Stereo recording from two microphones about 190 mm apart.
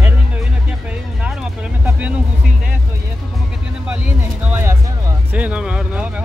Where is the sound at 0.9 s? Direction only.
5° right (ahead or behind).